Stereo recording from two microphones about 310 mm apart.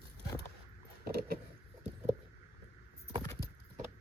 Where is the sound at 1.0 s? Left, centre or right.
Right.